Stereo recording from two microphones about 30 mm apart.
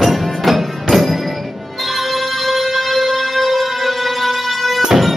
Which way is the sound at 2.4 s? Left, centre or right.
Centre.